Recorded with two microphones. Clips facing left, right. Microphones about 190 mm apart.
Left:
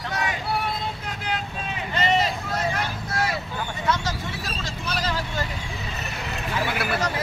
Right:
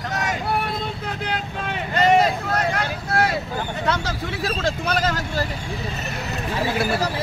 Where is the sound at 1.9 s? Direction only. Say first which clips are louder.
Right 6 dB; 50° right (ahead or behind).